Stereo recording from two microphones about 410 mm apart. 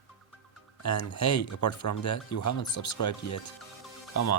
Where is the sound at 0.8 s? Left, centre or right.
Left.